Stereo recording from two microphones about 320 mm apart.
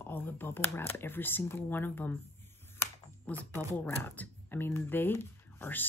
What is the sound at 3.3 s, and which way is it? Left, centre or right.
Speech, centre.